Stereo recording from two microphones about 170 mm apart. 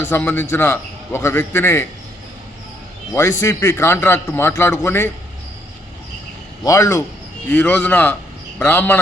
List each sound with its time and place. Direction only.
0.0 s a man's voice: 10° left (ahead or behind)
3.1 s a man's voice: 15° left (ahead or behind)
6.7 s a man's voice: 20° left (ahead or behind)